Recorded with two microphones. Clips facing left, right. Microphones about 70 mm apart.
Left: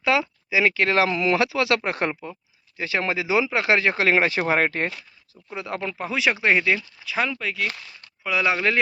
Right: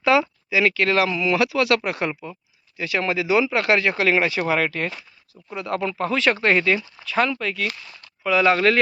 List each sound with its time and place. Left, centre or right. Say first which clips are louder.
0.0 s a sound: right 4 dB; centre
0.5 s speech: right 1 dB; left
5.5 s speech: right 4 dB; centre
5.9 s speech: right 2 dB; centre